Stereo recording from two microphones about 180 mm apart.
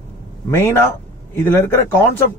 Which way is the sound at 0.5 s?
15° left (ahead or behind).